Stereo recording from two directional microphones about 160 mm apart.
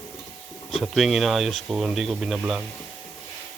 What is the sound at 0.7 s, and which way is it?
Speech, centre (ahead or behind).